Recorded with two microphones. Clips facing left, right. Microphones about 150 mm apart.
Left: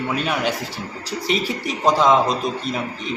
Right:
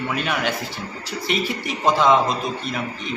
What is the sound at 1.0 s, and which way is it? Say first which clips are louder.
Speech: left 2 dB; 35° left (ahead or behind).